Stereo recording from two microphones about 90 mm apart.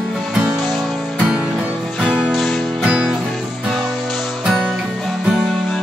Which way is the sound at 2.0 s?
5° right (ahead or behind).